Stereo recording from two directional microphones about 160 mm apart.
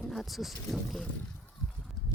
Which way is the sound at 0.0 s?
Centre (ahead or behind).